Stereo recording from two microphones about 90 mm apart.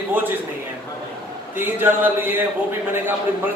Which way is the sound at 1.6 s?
20° right (ahead or behind).